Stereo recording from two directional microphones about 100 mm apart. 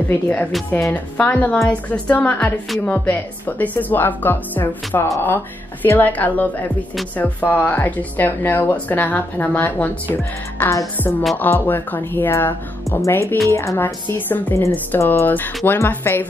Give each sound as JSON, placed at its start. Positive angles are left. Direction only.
{"t": 0.1, "sound": "speech", "side_deg": 15}